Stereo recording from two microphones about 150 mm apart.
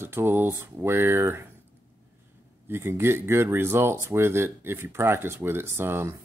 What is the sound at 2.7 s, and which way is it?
Speech, 15° right (ahead or behind).